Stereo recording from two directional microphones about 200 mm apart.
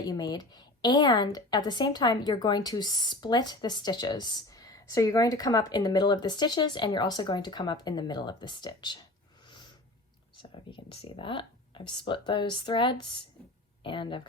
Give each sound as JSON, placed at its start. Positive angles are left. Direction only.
{"t": 0.0, "sound": "a woman's voice", "side_deg": 20}
{"t": 10.7, "sound": "a woman's voice", "side_deg": 25}